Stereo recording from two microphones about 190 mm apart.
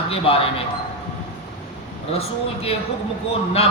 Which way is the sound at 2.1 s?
30° left (ahead or behind).